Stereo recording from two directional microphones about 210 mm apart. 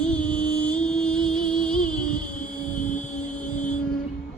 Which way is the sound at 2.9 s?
35° left (ahead or behind).